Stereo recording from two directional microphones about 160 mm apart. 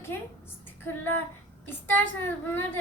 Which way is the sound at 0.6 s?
15° left (ahead or behind).